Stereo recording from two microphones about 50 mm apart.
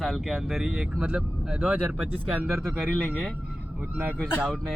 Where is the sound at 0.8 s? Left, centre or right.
Right.